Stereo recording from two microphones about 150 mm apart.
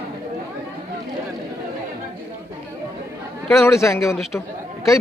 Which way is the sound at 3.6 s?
20° left (ahead or behind).